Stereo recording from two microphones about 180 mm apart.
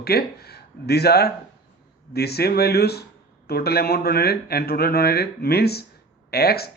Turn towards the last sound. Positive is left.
turn(degrees=60)  # may be behind; listen again after turning